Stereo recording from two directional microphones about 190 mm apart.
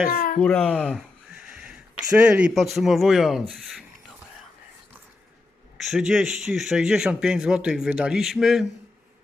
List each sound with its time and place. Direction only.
0.1 s speech: 50° left (ahead or behind)
0.3 s a sound: 5° left (ahead or behind)
2.1 s speech: 5° right (ahead or behind)
5.8 s speech: 5° right (ahead or behind)